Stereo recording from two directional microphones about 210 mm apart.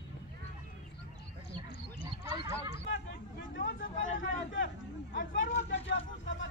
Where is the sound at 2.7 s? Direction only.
55° left (ahead or behind).